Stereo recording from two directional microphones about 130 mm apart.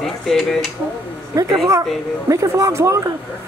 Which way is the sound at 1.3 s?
25° right (ahead or behind).